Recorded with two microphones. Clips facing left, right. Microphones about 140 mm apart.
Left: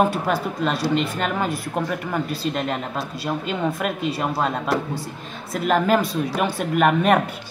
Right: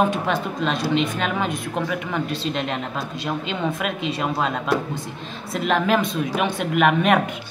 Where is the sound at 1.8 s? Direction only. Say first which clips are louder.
Even; 5° left (ahead or behind).